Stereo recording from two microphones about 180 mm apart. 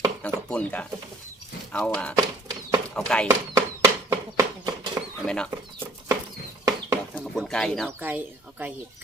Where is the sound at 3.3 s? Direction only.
15° right (ahead or behind).